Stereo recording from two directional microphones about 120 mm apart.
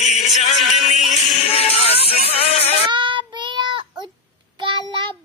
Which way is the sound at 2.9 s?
40° right (ahead or behind).